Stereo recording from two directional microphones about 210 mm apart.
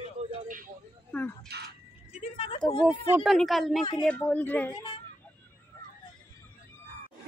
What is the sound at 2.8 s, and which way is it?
Speech, centre (ahead or behind).